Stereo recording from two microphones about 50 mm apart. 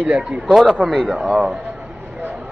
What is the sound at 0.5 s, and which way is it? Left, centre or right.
Speech, centre.